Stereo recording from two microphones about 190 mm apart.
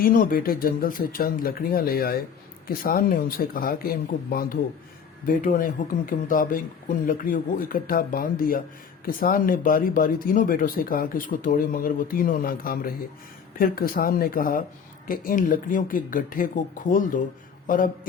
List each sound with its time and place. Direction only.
0.0 s speech: 50° left (ahead or behind)